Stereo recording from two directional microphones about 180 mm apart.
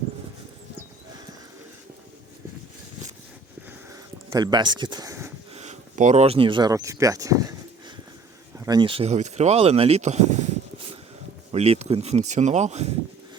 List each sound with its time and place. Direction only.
4.3 s speech: 20° right (ahead or behind)
5.5 s speech: 40° right (ahead or behind)
11.5 s speech: 35° right (ahead or behind)